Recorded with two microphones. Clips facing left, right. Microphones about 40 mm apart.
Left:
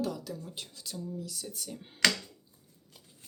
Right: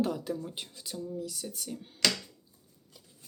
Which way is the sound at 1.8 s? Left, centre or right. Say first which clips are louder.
Right 1 dB; left.